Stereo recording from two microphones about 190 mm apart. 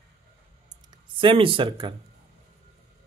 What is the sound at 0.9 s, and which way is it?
Speech, 25° right (ahead or behind).